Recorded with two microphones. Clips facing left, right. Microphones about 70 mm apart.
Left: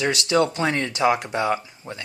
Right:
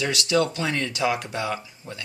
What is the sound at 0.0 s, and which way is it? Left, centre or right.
Speech, left.